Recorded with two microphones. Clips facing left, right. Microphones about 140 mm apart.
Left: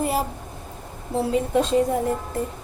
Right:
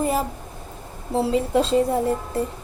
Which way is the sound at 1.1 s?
25° right (ahead or behind).